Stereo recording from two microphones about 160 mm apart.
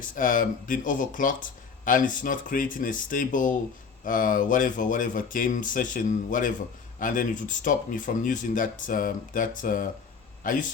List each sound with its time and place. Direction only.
0.2 s speech: 55° left (ahead or behind)